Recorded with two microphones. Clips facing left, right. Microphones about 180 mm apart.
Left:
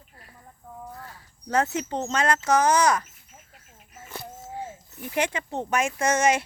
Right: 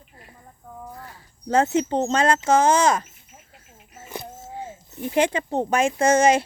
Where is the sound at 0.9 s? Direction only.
20° right (ahead or behind).